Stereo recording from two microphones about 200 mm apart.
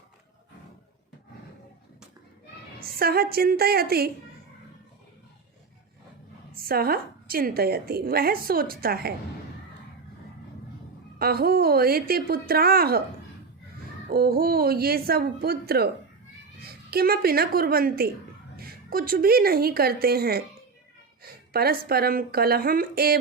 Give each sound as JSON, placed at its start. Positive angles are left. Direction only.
{"t": 2.8, "sound": "a woman's voice", "side_deg": -50}
{"t": 6.6, "sound": "a woman's voice", "side_deg": -50}
{"t": 11.2, "sound": "a woman's voice", "side_deg": -50}
{"t": 14.1, "sound": "a woman's voice", "side_deg": -50}